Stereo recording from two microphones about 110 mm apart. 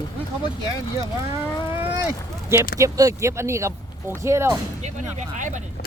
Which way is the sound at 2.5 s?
30° right (ahead or behind).